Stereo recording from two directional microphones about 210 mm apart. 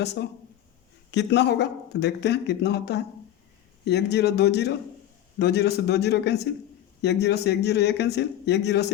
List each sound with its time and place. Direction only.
0.0 s speech: 55° left (ahead or behind)